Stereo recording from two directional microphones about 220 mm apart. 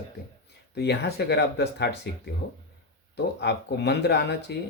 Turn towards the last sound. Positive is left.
turn(degrees=50)  # may be behind; listen again after turning